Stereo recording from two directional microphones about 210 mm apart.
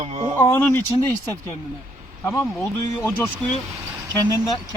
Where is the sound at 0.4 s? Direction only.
15° left (ahead or behind).